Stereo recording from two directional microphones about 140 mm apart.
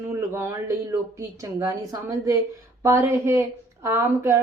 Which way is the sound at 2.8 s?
20° right (ahead or behind).